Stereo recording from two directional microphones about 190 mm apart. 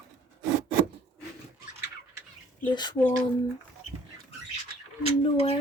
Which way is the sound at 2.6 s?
25° left (ahead or behind).